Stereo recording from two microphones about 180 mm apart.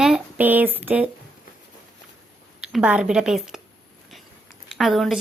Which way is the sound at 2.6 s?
5° right (ahead or behind).